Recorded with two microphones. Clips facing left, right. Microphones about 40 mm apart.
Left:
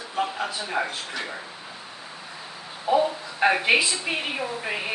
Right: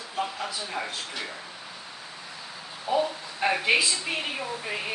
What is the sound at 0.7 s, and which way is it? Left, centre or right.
Speech, left.